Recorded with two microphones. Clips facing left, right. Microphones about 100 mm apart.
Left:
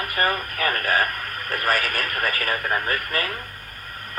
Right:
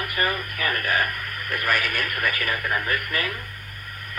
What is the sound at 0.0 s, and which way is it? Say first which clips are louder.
Speech: left 2 dB; 40° left (ahead or behind).